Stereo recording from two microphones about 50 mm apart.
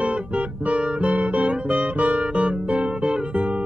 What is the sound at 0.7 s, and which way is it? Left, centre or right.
Guitar, right.